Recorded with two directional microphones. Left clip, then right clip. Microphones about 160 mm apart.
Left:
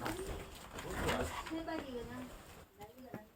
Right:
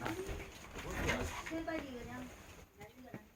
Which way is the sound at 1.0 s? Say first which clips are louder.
Left 1 dB; 60° left (ahead or behind).